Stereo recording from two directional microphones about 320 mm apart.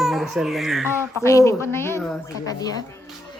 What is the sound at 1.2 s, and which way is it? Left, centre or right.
A woman's voice, centre.